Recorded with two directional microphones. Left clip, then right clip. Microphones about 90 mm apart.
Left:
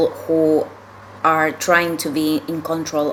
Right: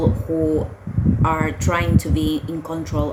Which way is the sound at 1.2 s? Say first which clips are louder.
Left 7 dB; 35° right (ahead or behind).